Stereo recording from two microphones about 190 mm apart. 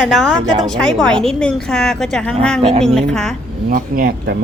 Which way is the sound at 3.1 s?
5° left (ahead or behind).